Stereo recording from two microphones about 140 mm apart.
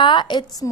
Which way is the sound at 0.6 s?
20° left (ahead or behind).